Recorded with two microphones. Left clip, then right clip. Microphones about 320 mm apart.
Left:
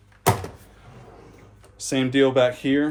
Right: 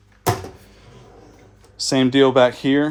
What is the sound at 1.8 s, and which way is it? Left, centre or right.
Speech, right.